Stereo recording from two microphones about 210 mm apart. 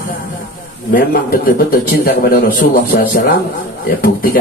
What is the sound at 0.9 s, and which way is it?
A man's voice, 45° left (ahead or behind).